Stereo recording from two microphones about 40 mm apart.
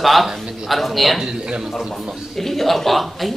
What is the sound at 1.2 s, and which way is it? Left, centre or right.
Speech, centre.